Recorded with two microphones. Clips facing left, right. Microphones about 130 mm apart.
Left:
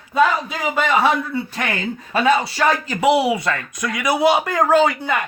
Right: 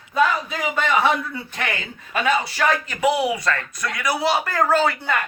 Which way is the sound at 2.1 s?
35° left (ahead or behind).